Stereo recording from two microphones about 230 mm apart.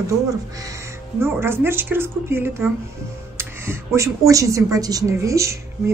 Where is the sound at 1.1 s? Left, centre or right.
Centre.